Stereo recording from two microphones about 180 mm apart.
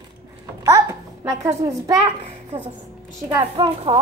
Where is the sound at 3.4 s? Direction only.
30° right (ahead or behind).